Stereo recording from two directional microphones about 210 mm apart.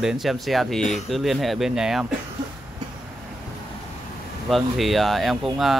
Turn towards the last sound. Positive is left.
turn(degrees=0)  # may be behind; listen again after turning